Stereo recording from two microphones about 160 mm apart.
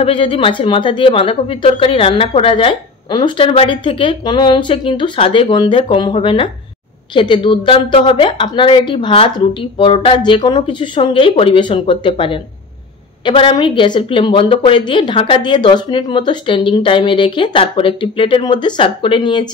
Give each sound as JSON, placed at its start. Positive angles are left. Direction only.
{"t": 0.0, "sound": "speech", "side_deg": 35}